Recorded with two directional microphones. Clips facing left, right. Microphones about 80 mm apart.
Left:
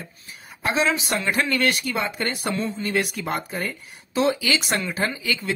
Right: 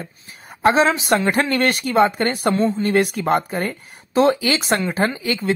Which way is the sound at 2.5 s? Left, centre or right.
Right.